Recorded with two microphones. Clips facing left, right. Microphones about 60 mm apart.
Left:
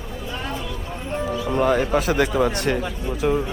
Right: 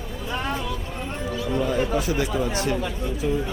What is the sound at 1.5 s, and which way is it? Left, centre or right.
Speech, left.